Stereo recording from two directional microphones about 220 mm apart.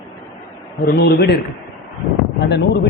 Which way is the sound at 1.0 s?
50° left (ahead or behind).